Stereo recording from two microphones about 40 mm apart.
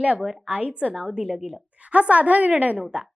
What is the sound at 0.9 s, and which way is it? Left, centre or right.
Speech, centre.